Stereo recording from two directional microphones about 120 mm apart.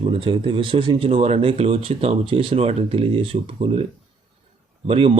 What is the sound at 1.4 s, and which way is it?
A man's voice, 50° right (ahead or behind).